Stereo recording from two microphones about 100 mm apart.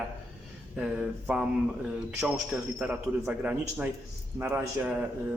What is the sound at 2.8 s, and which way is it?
Speech, 10° right (ahead or behind).